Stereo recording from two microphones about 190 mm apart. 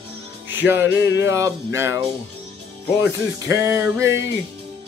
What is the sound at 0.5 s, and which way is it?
Speech, 10° right (ahead or behind).